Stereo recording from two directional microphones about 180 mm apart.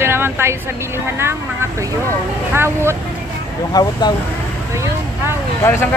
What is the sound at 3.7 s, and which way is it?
Speech, 20° left (ahead or behind).